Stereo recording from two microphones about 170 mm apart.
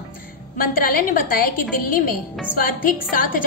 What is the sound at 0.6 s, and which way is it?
A woman's voice, 60° left (ahead or behind).